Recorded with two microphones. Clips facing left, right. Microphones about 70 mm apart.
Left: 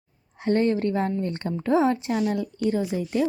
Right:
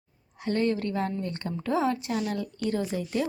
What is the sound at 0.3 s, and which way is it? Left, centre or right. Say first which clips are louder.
Speech: left 5 dB; left.